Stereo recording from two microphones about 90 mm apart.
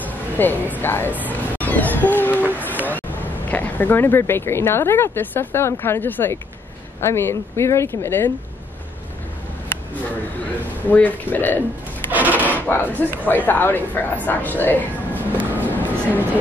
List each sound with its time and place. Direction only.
0.0 s speech: 20° left (ahead or behind)
2.5 s a sound: 20° left (ahead or behind)
2.9 s speech: 20° left (ahead or behind)
10.9 s speech: 20° left (ahead or behind)
12.1 s filing: 20° right (ahead or behind)
12.4 s speech: 20° left (ahead or behind)
15.5 s music: 20° left (ahead or behind)